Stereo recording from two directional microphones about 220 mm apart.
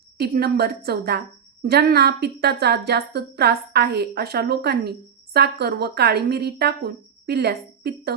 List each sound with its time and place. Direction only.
0.2 s a woman's voice: 45° right (ahead or behind)